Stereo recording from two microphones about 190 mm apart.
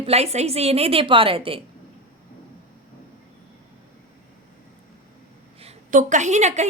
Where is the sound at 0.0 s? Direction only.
35° right (ahead or behind).